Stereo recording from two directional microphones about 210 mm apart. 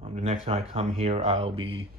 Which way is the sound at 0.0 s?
30° right (ahead or behind).